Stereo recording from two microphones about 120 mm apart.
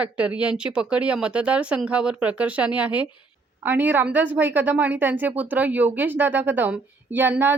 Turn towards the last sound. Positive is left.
turn(degrees=-15)  # may be behind; listen again after turning